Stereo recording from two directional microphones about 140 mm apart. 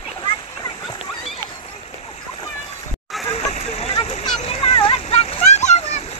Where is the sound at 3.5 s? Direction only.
45° left (ahead or behind).